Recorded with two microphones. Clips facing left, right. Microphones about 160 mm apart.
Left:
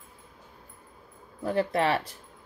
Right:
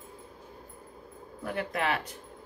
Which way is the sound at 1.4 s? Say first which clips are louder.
Left 6 dB; 35° left (ahead or behind).